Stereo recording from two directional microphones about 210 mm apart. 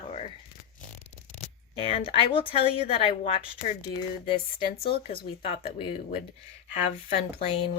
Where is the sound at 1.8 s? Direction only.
25° left (ahead or behind).